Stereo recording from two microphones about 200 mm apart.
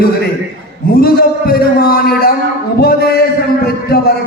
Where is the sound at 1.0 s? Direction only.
50° left (ahead or behind).